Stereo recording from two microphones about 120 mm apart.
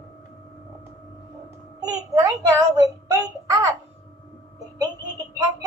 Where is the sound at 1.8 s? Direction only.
30° right (ahead or behind).